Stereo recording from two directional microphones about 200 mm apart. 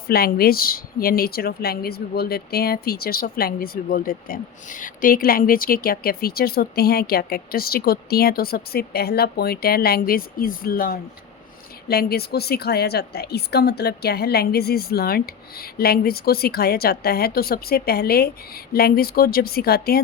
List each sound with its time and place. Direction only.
0.1 s speech: 50° left (ahead or behind)